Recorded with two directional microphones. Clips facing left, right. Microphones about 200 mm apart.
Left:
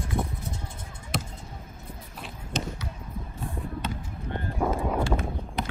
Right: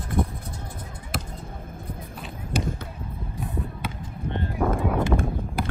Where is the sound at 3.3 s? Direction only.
15° right (ahead or behind).